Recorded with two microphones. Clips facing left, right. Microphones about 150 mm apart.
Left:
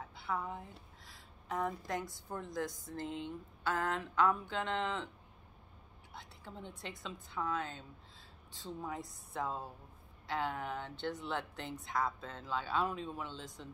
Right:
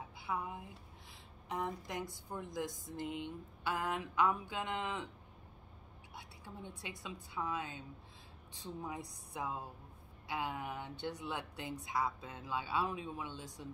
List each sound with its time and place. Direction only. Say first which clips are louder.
0.1 s a woman's voice: left 2 dB; 15° right (ahead or behind)
6.1 s a woman's voice: left 1 dB; 10° right (ahead or behind)
8.8 s a woman's voice: left 2 dB; 15° right (ahead or behind)